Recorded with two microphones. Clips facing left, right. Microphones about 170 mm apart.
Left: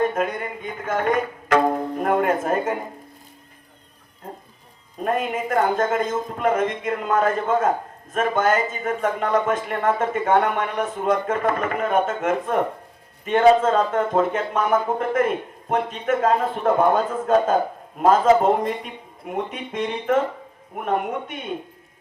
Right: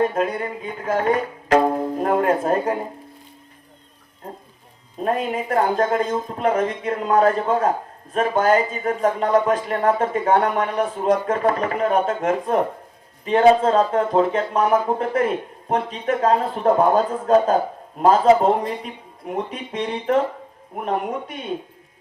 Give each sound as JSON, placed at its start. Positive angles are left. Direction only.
{"t": 0.1, "sound": "speech", "side_deg": -35}
{"t": 5.0, "sound": "speech", "side_deg": -35}